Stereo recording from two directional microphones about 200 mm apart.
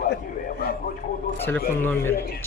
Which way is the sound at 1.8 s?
10° left (ahead or behind).